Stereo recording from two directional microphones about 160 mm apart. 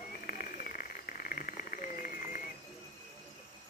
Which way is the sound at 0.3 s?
60° left (ahead or behind).